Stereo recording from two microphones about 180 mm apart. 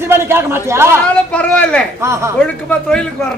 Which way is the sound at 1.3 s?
5° left (ahead or behind).